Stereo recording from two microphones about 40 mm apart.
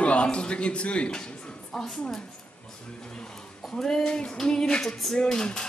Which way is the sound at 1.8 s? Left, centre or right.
Centre.